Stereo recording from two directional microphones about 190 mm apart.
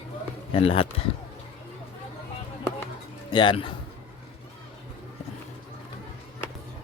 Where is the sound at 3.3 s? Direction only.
25° left (ahead or behind).